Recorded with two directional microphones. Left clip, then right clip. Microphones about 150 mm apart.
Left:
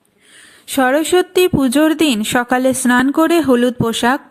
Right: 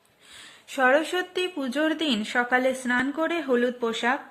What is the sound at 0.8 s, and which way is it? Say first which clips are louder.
A woman's voice: left 8 dB; 45° left (ahead or behind).